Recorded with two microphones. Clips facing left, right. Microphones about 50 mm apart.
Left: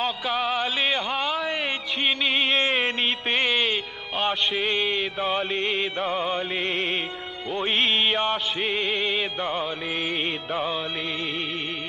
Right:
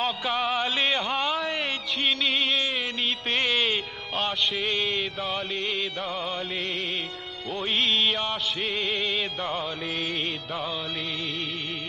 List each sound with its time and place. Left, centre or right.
0.0 s a sound: centre
2.0 s music: centre
2.6 s music: left
3.2 s music: centre
5.2 s music: left
7.5 s music: centre
8.1 s music: left
8.6 s music: centre